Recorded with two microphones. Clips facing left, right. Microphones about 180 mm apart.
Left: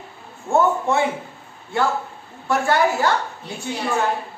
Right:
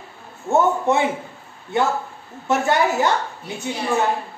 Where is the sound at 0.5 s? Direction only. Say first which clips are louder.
Right 1 dB; 20° right (ahead or behind).